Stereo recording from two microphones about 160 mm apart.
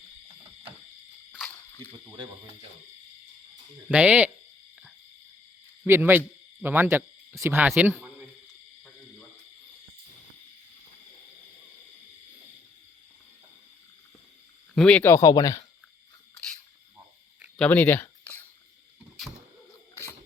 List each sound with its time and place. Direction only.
1.5 s snake: 15° left (ahead or behind)
3.8 s hoot: 10° right (ahead or behind)
5.8 s speech: 15° right (ahead or behind)
7.7 s hoot: 10° right (ahead or behind)
14.8 s speech: 5° left (ahead or behind)
15.0 s speech: 20° left (ahead or behind)
17.6 s a sound: 10° left (ahead or behind)